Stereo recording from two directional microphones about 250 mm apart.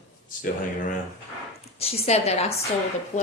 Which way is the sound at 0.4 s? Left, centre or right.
Left.